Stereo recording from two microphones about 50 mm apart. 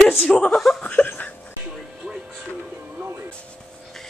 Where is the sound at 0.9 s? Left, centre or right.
Left.